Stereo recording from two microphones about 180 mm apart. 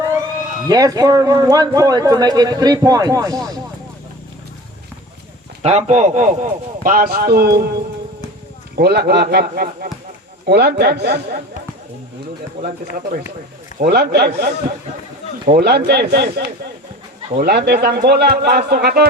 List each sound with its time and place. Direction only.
0.7 s speech: 20° right (ahead or behind)
5.6 s a man's voice: 40° right (ahead or behind); by 11.3 s 65° right (ahead or behind)
12.6 s a man's voice: 55° right (ahead or behind)
15.5 s a man's voice: 65° right (ahead or behind)
17.3 s a man's voice: 65° right (ahead or behind)